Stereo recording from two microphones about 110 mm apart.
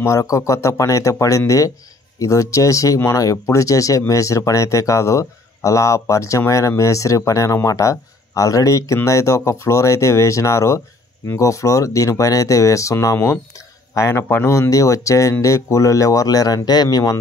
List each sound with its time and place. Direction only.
0.0 s speech: 25° left (ahead or behind)